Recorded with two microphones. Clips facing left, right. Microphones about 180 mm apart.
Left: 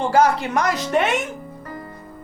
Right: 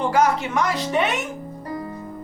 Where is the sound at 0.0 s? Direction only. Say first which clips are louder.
Left 2 dB; 30° left (ahead or behind).